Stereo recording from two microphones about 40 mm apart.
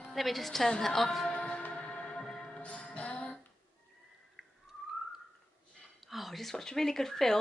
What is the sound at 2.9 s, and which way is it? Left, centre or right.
Music, left.